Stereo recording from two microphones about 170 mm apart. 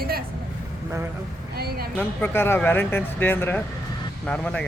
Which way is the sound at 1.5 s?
70° right (ahead or behind).